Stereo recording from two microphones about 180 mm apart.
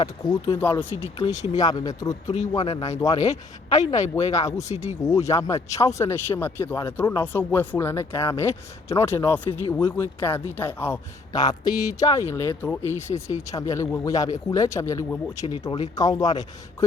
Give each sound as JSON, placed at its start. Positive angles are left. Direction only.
{"t": 0.0, "sound": "speech", "side_deg": 25}
{"t": 0.9, "sound": "speech", "side_deg": 35}
{"t": 1.5, "sound": "speech", "side_deg": 20}
{"t": 2.2, "sound": "speech", "side_deg": 40}
{"t": 3.0, "sound": "speech", "side_deg": 20}
{"t": 4.2, "sound": "speech", "side_deg": 35}
{"t": 5.0, "sound": "speech", "side_deg": 15}